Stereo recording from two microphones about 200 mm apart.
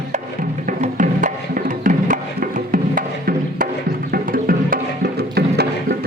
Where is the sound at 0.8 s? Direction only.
40° right (ahead or behind).